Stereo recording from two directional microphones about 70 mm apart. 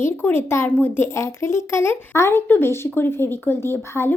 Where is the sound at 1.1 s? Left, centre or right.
Left.